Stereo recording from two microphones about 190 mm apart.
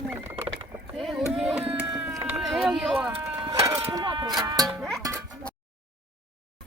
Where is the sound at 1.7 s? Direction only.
5° right (ahead or behind).